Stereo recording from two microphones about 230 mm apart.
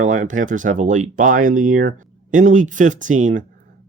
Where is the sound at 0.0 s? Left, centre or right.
Right.